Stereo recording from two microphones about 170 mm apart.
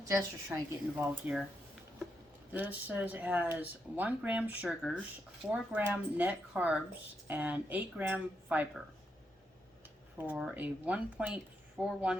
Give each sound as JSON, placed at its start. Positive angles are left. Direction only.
{"t": 0.0, "sound": "a woman's voice", "side_deg": -20}
{"t": 0.9, "sound": "speech", "side_deg": -5}
{"t": 2.5, "sound": "speech", "side_deg": -10}
{"t": 10.2, "sound": "speech", "side_deg": -5}